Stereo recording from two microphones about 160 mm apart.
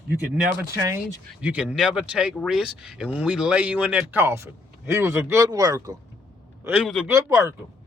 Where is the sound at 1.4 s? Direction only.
5° right (ahead or behind).